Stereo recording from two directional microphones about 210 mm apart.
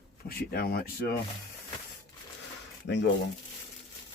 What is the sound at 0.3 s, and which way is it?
Speech, 45° left (ahead or behind).